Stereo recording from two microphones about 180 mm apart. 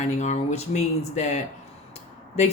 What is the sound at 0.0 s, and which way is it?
Speech, 40° left (ahead or behind).